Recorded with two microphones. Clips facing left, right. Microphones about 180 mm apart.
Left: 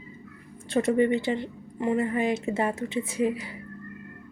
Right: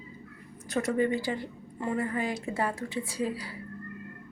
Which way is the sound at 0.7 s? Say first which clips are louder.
Left 5 dB; 25° left (ahead or behind).